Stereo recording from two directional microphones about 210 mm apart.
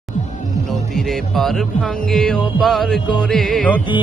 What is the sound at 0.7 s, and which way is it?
Speech, centre (ahead or behind).